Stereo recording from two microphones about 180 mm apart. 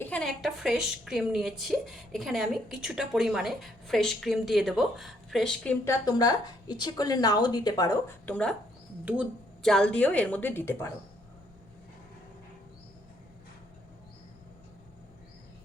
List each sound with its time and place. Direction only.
0.0 s a woman's voice: 5° left (ahead or behind)
5.8 s a woman's voice: 20° left (ahead or behind)
9.6 s a woman's voice: 5° left (ahead or behind)